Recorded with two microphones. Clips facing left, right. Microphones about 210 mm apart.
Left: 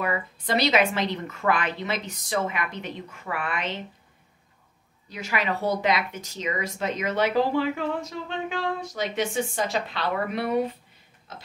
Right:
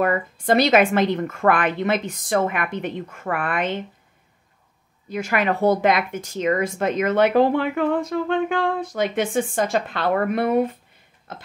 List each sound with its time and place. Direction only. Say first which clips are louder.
0.0 s speech: right 7 dB; 50° right (ahead or behind)
5.1 s speech: right 6 dB; 50° right (ahead or behind)
11.3 s a sound: right 5 dB; 55° right (ahead or behind)